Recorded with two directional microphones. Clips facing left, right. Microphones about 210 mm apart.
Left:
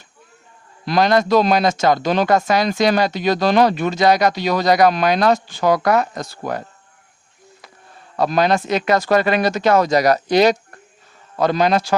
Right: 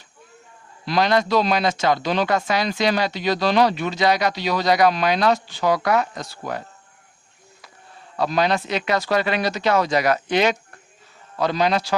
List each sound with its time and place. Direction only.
0.9 s speech: 45° left (ahead or behind)
8.1 s speech: 45° left (ahead or behind)
11.3 s speech: 50° left (ahead or behind)